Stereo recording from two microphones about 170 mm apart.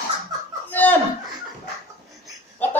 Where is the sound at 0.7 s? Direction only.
10° left (ahead or behind).